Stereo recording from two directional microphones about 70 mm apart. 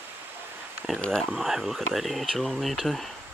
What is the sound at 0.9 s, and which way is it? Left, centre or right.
Speech, centre.